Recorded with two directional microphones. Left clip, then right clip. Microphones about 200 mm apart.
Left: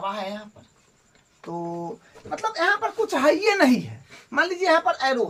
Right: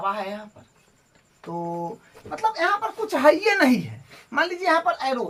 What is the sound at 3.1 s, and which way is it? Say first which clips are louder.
A woman's voice: right 3 dB; 15° left (ahead or behind).